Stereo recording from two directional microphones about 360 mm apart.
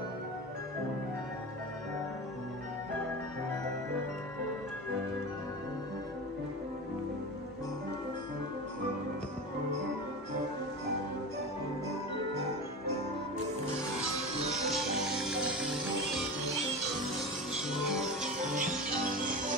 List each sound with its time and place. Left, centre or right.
14.7 s music: centre
17.5 s music: centre
18.2 s music: right